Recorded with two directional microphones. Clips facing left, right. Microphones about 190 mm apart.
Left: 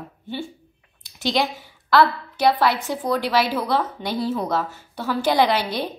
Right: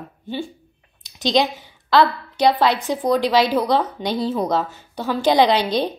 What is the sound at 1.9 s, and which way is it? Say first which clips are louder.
A woman's voice: right 1 dB; 20° right (ahead or behind).